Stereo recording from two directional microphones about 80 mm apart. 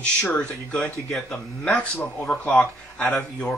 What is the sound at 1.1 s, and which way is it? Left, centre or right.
Speech, centre.